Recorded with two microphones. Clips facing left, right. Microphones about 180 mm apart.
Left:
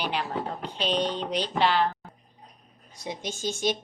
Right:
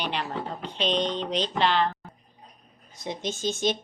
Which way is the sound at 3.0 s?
10° left (ahead or behind).